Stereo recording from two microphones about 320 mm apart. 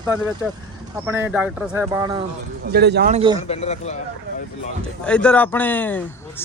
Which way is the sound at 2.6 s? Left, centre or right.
Right.